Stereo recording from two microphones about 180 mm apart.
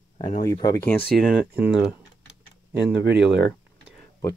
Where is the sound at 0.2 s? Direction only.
35° left (ahead or behind).